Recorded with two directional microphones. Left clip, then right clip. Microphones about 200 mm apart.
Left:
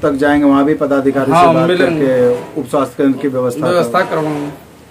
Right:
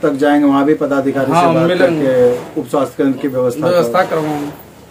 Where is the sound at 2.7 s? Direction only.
35° left (ahead or behind).